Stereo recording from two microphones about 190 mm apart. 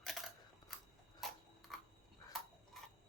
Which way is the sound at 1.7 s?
Centre (ahead or behind).